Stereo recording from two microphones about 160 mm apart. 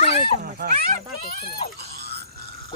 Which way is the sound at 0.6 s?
90° right.